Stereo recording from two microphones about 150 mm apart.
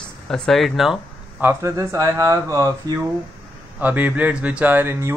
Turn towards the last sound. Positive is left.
turn(degrees=-15)  # may be behind; listen again after turning